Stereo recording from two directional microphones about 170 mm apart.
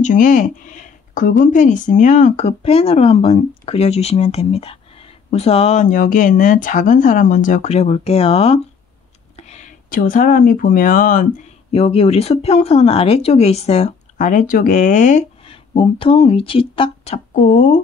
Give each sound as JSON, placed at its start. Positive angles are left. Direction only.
{"t": 0.0, "sound": "a woman's voice", "side_deg": 50}
{"t": 11.7, "sound": "a woman's voice", "side_deg": 35}
{"t": 15.4, "sound": "speech", "side_deg": 35}